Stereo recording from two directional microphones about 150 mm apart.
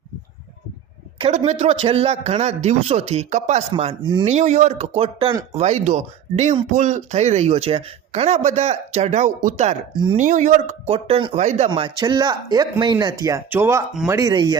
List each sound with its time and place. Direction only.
1.5 s speech: 45° right (ahead or behind)
4.0 s speech: 30° right (ahead or behind)
4.4 s speech: 50° right (ahead or behind)
9.9 s speech: 30° right (ahead or behind)
10.2 s speech: 55° right (ahead or behind)
10.9 s speech: 40° right (ahead or behind)
11.7 s speech: 30° right (ahead or behind)